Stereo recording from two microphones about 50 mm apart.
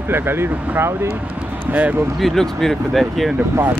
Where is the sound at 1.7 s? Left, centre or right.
Right.